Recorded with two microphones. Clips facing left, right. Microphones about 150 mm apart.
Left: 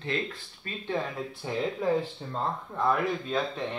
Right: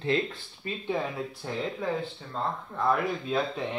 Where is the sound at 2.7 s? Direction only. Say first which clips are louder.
Even; centre (ahead or behind).